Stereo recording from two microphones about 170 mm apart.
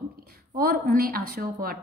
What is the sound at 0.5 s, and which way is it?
A woman's voice, 60° right (ahead or behind).